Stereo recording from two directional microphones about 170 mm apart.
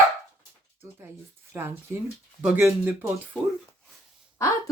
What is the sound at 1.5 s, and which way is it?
Speech, 15° right (ahead or behind).